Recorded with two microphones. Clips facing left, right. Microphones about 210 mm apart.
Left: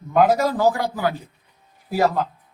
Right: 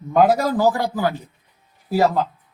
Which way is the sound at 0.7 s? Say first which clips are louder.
Right 2 dB; 35° right (ahead or behind).